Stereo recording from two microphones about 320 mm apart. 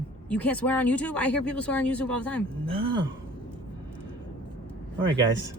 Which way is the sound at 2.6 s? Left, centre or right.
Centre.